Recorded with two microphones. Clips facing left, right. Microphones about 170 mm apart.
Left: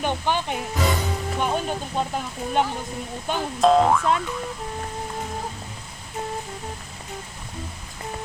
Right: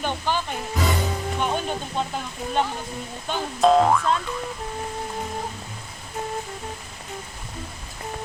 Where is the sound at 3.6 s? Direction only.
Centre (ahead or behind).